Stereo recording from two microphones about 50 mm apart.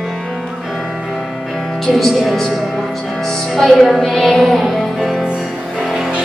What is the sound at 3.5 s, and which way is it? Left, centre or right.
Music, centre.